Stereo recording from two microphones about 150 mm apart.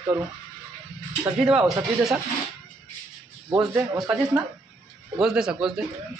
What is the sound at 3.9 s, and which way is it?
Speech, 5° right (ahead or behind).